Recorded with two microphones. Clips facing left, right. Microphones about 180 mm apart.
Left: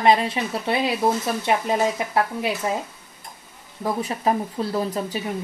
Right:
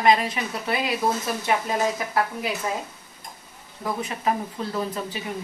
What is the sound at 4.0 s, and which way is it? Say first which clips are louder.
A woman's voice: left 3 dB; 35° left (ahead or behind).